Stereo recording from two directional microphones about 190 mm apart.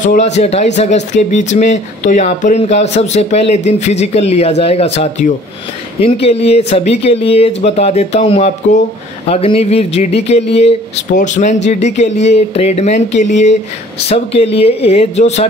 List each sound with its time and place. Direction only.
0.0 s speech: 40° left (ahead or behind)